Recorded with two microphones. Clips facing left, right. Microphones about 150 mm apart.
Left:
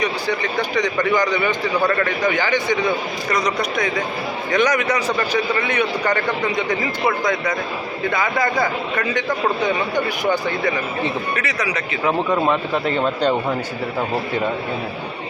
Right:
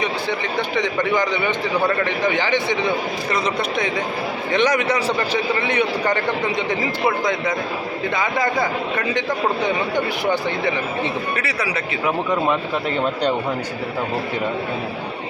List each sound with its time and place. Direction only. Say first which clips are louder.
0.8 s a man's voice: left 2 dB; 25° right (ahead or behind)
8.1 s a man's voice: left 1 dB; 20° right (ahead or behind)